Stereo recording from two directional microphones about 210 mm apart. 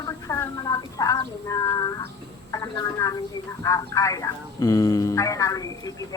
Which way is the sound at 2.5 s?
15° left (ahead or behind).